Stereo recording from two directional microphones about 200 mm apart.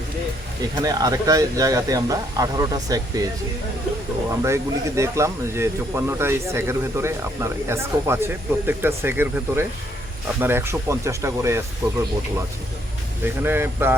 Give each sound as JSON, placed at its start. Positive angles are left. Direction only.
{"t": 0.8, "sound": "speech", "side_deg": -20}
{"t": 4.3, "sound": "speech", "side_deg": -15}
{"t": 13.2, "sound": "speech", "side_deg": -10}